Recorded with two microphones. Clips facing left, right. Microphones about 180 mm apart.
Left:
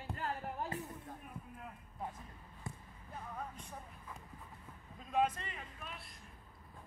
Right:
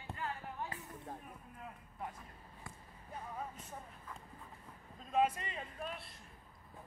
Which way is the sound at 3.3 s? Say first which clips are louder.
Even; 5° right (ahead or behind).